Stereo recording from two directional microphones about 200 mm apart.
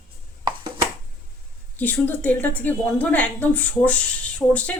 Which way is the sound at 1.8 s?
10° left (ahead or behind).